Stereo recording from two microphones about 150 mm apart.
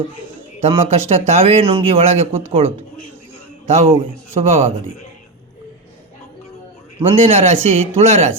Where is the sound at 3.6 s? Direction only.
45° right (ahead or behind).